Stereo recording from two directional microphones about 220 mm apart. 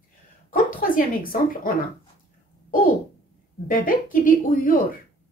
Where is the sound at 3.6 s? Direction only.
40° left (ahead or behind).